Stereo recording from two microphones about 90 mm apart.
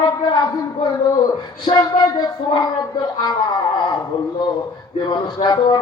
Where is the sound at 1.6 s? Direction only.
55° left (ahead or behind).